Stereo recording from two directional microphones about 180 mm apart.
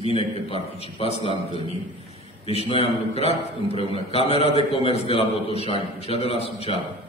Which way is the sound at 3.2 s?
35° left (ahead or behind).